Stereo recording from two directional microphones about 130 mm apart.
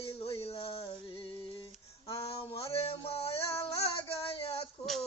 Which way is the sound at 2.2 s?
45° left (ahead or behind).